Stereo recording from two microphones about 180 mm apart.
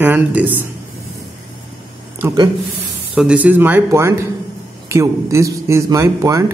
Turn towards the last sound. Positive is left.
turn(degrees=-20)  # may be behind; listen again after turning